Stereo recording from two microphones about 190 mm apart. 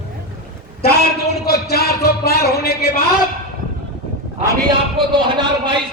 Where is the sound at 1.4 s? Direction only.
55° left (ahead or behind).